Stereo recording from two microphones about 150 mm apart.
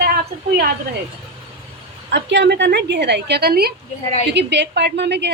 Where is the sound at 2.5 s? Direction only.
90° right.